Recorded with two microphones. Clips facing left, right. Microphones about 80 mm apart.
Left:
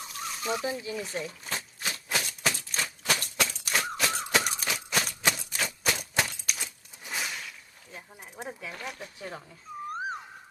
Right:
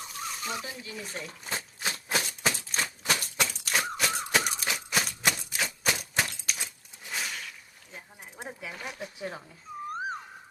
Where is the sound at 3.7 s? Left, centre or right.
Centre.